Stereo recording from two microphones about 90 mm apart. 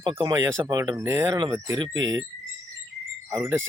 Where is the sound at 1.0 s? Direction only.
35° right (ahead or behind).